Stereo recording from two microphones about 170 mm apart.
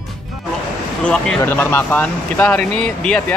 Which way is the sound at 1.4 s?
15° left (ahead or behind).